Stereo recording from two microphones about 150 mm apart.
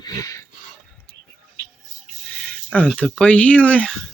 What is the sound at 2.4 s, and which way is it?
Speech, 10° left (ahead or behind).